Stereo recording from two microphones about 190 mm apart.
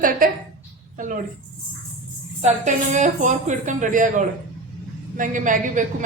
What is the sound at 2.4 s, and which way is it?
A woman's voice, 40° right (ahead or behind).